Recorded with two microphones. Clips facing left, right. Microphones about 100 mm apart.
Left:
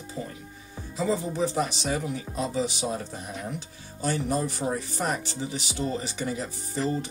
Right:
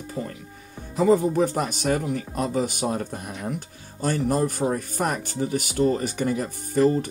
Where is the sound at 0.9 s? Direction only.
50° right (ahead or behind).